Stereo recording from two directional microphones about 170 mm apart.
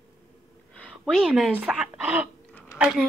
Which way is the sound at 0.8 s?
Centre (ahead or behind).